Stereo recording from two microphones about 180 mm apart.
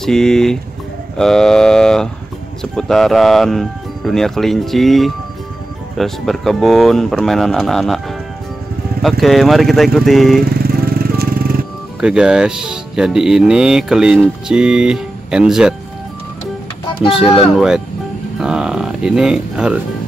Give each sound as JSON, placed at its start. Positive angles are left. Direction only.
{"t": 0.0, "sound": "speech", "side_deg": 5}
{"t": 9.2, "sound": "speech", "side_deg": 0}
{"t": 10.4, "sound": "vehicle", "side_deg": -55}
{"t": 12.0, "sound": "speech", "side_deg": -5}
{"t": 17.0, "sound": "speech", "side_deg": 30}
{"t": 17.6, "sound": "speech", "side_deg": 0}